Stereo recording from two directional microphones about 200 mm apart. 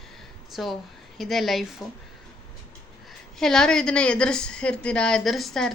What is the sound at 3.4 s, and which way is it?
Speech, 5° left (ahead or behind).